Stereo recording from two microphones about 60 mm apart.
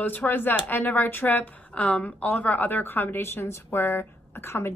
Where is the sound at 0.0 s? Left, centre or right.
Left.